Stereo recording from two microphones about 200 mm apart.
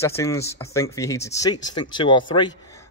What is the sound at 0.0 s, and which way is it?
Speech, 15° left (ahead or behind).